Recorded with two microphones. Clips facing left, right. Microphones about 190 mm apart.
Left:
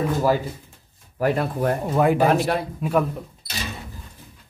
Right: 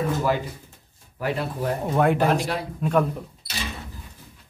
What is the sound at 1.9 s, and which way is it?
Speech, centre (ahead or behind).